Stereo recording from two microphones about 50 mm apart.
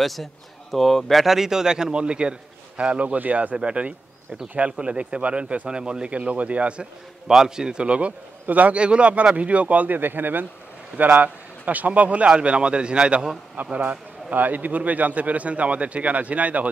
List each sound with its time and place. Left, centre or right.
0.0 s speech: centre
1.2 s a man's voice: centre; by 3.5 s right
3.5 s a man's voice: right
6.1 s a man's voice: right
7.2 s a man's voice: centre
14.3 s a man's voice: right